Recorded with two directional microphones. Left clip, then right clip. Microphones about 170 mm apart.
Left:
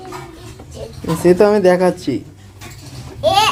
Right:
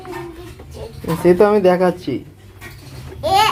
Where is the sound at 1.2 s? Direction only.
15° left (ahead or behind).